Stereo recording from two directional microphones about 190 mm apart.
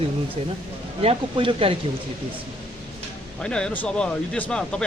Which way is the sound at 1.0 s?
25° right (ahead or behind).